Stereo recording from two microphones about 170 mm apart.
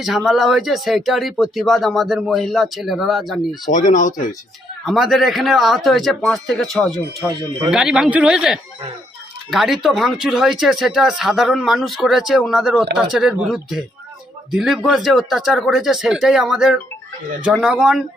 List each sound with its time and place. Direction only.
0.3 s speech: centre (ahead or behind)
3.7 s speech: 50° left (ahead or behind)
4.9 s speech: centre (ahead or behind)